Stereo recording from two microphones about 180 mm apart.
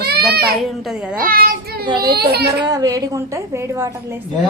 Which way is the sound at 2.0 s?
60° right (ahead or behind).